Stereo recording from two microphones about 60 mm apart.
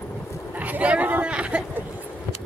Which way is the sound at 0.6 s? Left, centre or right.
Right.